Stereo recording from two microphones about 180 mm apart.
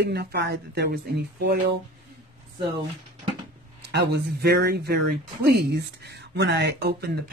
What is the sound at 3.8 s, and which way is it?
Speech, 65° right (ahead or behind).